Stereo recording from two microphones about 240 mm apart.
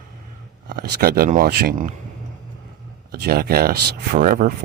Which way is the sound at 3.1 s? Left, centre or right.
Right.